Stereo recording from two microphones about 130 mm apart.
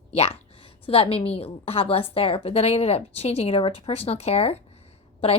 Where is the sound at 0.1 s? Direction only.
55° left (ahead or behind).